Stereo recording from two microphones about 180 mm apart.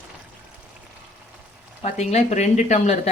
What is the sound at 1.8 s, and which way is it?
Speech, 40° left (ahead or behind).